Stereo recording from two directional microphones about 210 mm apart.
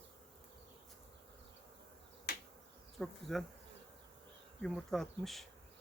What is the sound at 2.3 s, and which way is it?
Insect, 50° left (ahead or behind).